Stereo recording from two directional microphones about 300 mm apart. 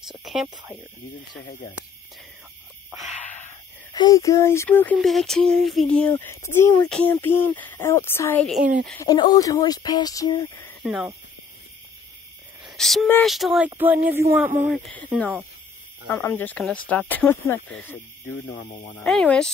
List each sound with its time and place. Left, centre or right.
0.1 s speech: centre
3.1 s a sound: left
3.4 s speech: centre
10.8 s speech: centre
12.6 s speech: centre
18.9 s speech: centre